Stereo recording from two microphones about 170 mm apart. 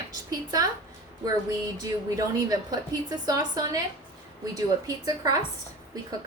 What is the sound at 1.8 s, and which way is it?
A woman's voice, 20° right (ahead or behind).